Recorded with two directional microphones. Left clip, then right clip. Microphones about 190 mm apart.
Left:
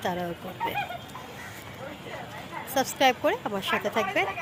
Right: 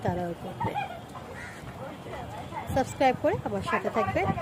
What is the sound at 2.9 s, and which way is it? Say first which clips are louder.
Speech: left 2 dB; centre (ahead or behind).